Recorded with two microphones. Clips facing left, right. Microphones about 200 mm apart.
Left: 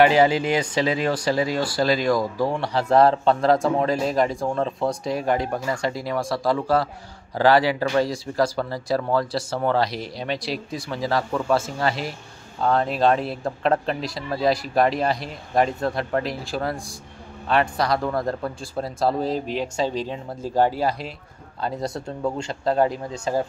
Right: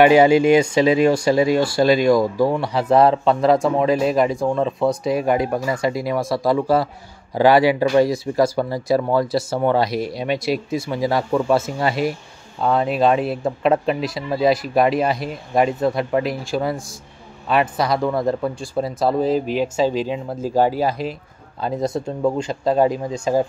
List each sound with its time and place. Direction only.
0.0 s speech: 15° right (ahead or behind)
1.4 s speech: 25° right (ahead or behind)
2.6 s speech: 5° right (ahead or behind)